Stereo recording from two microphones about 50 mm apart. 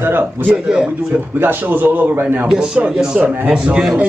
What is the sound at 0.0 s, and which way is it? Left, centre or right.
A man's voice, right.